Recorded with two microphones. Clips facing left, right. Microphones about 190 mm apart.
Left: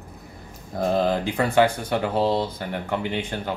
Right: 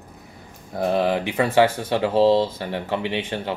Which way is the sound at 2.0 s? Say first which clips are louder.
Right 6 dB; 90° right.